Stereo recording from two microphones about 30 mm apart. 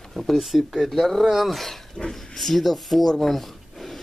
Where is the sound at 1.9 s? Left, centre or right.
Centre.